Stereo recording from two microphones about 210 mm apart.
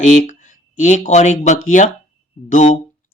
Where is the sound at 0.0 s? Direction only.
35° left (ahead or behind).